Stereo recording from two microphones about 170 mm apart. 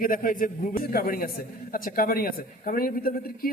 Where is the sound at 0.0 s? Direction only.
55° left (ahead or behind).